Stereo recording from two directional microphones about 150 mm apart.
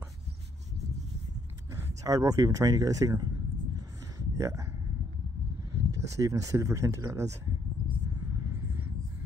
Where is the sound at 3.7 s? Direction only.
25° right (ahead or behind).